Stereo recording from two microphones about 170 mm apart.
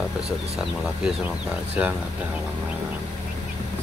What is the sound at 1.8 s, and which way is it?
Speech, 10° right (ahead or behind).